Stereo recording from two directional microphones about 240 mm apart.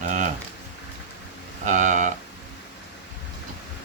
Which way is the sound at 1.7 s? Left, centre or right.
Right.